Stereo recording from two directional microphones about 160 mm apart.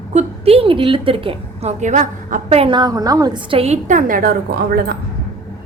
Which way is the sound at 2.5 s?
35° right (ahead or behind).